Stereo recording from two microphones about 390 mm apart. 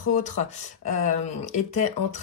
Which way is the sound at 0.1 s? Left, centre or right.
Centre.